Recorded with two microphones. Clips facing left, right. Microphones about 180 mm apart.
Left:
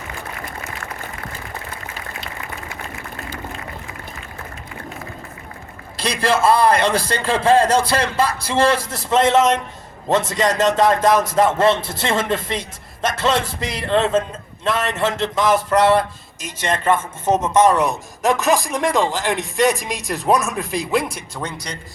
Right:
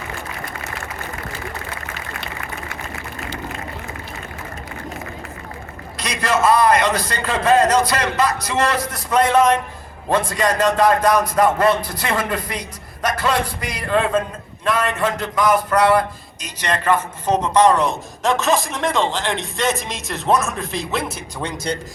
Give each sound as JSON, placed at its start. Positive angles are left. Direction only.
{"t": 6.0, "sound": "speech", "side_deg": 30}
{"t": 18.2, "sound": "speech", "side_deg": 0}
{"t": 20.1, "sound": "speech", "side_deg": 0}